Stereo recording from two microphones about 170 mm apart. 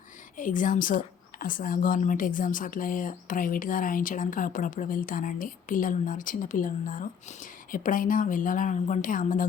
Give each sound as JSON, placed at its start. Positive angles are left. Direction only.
{"t": 0.3, "sound": "speech", "side_deg": 50}